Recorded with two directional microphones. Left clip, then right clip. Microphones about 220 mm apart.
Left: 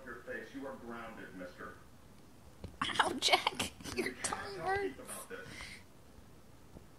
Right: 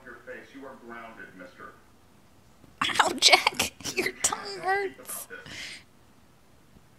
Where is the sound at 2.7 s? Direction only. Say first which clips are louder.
Right 9 dB; 25° right (ahead or behind).